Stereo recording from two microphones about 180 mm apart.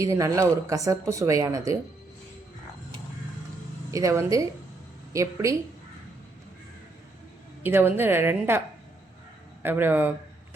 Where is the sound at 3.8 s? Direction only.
20° right (ahead or behind).